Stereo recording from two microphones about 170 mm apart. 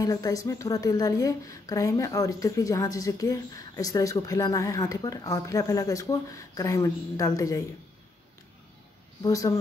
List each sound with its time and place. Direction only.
0.0 s a woman's voice: 20° left (ahead or behind)
9.2 s a woman's voice: 20° left (ahead or behind)